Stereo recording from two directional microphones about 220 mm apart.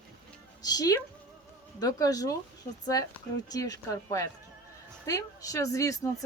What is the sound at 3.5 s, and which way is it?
Speech, 15° left (ahead or behind).